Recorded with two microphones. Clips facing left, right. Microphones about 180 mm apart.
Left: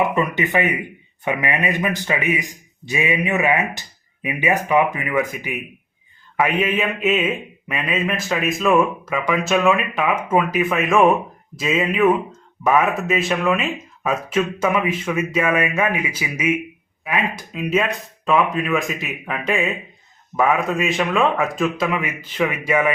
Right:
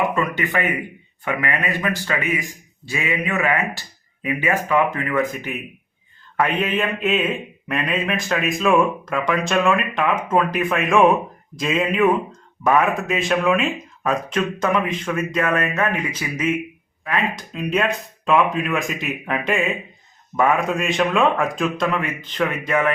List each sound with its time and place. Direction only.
0.1 s speech: 20° left (ahead or behind)